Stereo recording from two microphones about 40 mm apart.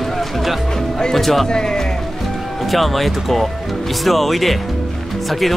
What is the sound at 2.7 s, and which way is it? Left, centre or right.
Speech, centre.